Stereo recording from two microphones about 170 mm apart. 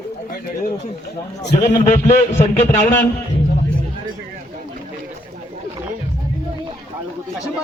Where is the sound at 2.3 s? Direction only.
40° left (ahead or behind).